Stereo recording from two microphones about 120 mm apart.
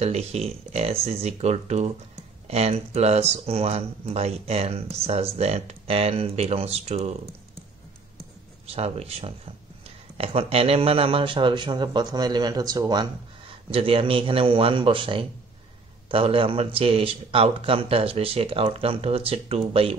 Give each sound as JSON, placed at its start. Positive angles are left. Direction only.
{"t": 0.0, "sound": "speech", "side_deg": -60}
{"t": 8.6, "sound": "speech", "side_deg": -60}
{"t": 13.7, "sound": "speech", "side_deg": -50}